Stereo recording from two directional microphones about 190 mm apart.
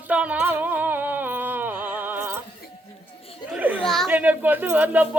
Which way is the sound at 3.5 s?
10° right (ahead or behind).